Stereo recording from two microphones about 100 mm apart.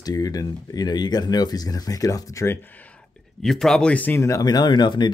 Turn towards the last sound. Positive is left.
turn(degrees=50)  # may be behind; listen again after turning